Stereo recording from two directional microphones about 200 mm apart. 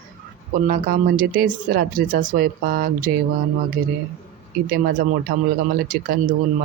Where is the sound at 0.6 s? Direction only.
45° right (ahead or behind).